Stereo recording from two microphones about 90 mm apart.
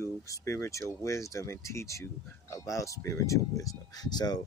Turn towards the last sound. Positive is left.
turn(degrees=50)  # may be behind; listen again after turning